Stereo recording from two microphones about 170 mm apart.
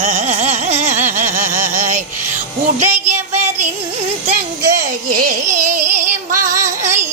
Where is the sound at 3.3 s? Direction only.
40° right (ahead or behind).